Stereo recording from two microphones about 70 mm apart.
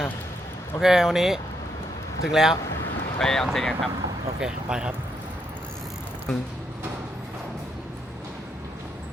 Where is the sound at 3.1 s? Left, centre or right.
Centre.